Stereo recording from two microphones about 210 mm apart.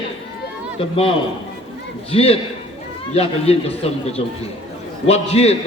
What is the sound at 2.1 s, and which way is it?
A man's voice, 25° left (ahead or behind).